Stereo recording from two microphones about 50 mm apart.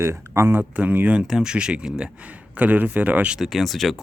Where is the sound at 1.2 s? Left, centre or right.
Centre; by 3.3 s right.